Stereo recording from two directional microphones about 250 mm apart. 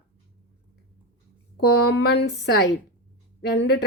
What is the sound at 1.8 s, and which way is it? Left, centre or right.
A woman's voice, left.